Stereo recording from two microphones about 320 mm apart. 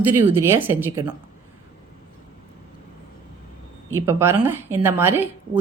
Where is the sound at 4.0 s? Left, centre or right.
Centre.